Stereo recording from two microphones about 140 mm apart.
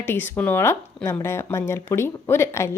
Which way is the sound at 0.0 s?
15° left (ahead or behind).